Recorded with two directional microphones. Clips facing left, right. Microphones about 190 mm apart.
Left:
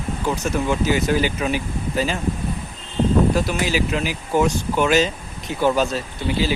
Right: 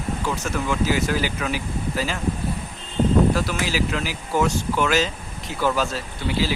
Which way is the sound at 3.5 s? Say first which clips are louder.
Left 3 dB; 20° left (ahead or behind).